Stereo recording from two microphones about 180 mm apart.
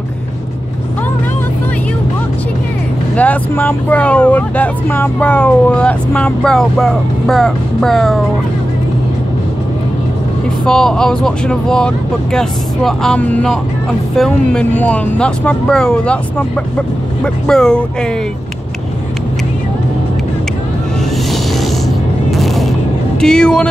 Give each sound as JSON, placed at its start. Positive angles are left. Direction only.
{"t": 3.2, "sound": "speech", "side_deg": 10}
{"t": 10.6, "sound": "speech", "side_deg": 5}
{"t": 22.3, "sound": "music", "side_deg": 0}
{"t": 23.2, "sound": "speech", "side_deg": 5}